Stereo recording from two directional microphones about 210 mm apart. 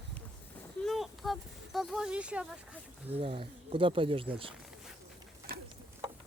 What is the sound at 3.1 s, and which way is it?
Speech, 25° right (ahead or behind).